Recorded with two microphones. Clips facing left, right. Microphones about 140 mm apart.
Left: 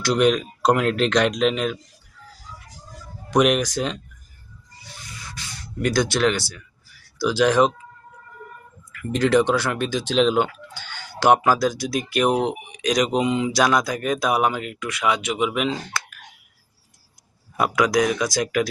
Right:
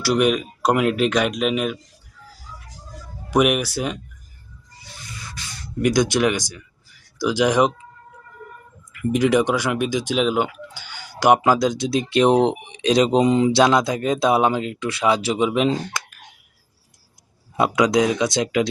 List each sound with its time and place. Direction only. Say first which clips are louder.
0.0 s speech: even; 10° right (ahead or behind)
3.2 s speech: even; 10° right (ahead or behind)
5.8 s speech: right 2 dB; 15° right (ahead or behind)
8.9 s speech: right 1 dB; 15° right (ahead or behind); by 15.8 s 30° right (ahead or behind)
17.6 s speech: right 2 dB; 25° right (ahead or behind)